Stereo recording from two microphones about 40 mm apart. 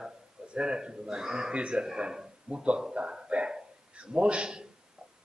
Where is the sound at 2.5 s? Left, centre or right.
Right.